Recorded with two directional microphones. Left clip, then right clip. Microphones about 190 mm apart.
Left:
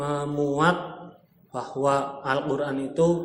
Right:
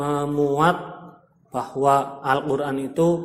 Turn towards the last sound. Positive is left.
turn(degrees=-55)  # may be behind; listen again after turning